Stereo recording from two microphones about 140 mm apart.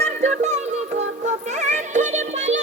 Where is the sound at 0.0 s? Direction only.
55° right (ahead or behind).